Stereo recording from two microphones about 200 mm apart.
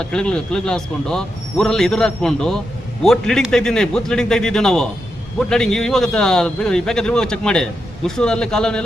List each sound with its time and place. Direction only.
0.0 s speech: 5° left (ahead or behind)